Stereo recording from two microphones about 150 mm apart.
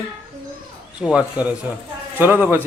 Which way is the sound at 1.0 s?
5° right (ahead or behind).